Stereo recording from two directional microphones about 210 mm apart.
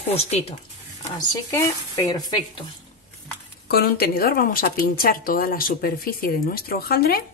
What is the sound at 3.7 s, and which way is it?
A woman's voice, 45° left (ahead or behind).